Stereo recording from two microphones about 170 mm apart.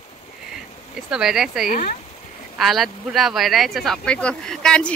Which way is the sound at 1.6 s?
55° left (ahead or behind).